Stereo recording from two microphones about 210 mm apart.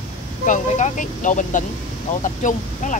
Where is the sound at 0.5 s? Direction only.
35° left (ahead or behind).